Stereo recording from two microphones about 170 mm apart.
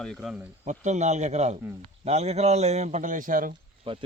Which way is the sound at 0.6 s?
45° right (ahead or behind).